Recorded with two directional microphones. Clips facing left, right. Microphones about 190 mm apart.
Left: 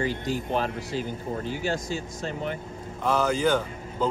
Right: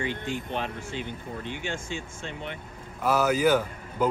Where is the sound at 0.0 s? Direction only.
40° left (ahead or behind).